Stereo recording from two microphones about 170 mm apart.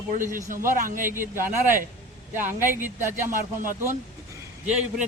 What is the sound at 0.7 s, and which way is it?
Speech, 55° right (ahead or behind).